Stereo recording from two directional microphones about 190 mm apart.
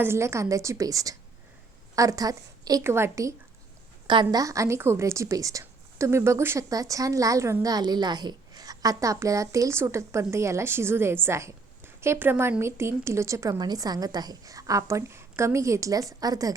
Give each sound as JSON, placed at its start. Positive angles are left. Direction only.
{"t": 0.0, "sound": "a woman's voice", "side_deg": -15}